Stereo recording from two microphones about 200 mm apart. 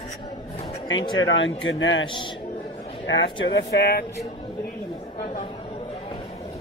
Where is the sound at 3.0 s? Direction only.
70° left (ahead or behind); by 4.0 s 50° left (ahead or behind).